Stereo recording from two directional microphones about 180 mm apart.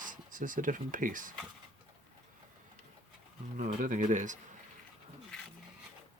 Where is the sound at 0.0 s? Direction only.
45° right (ahead or behind).